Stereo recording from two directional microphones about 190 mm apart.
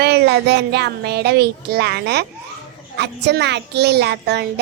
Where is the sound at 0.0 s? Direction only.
60° right (ahead or behind).